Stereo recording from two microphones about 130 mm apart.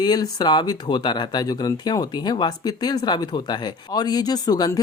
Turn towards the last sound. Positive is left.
turn(degrees=30)  # may be behind; listen again after turning